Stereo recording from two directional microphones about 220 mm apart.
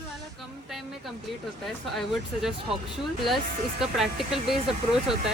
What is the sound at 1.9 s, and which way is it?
Speech, centre (ahead or behind).